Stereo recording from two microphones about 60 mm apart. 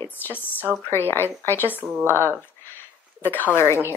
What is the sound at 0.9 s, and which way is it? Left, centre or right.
Speech, left.